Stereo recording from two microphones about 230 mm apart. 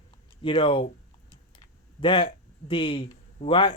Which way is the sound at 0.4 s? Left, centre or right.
Left.